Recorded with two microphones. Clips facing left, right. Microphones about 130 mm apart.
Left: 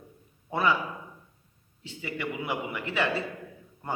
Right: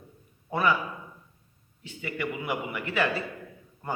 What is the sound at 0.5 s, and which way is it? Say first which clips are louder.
Speech: right 1 dB; 25° left (ahead or behind).